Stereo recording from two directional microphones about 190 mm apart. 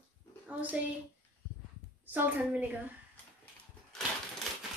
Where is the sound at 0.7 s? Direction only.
5° right (ahead or behind).